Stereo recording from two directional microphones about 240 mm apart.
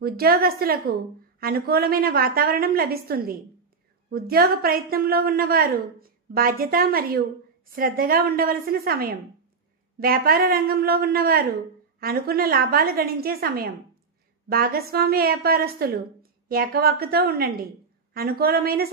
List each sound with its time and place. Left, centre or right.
0.0 s a woman's voice: right